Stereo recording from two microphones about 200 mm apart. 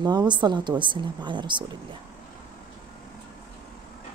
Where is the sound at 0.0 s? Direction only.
20° right (ahead or behind).